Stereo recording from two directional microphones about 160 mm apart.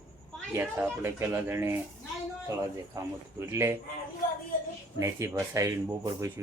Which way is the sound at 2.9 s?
15° right (ahead or behind).